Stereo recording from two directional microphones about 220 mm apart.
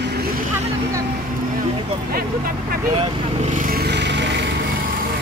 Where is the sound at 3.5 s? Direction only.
40° right (ahead or behind).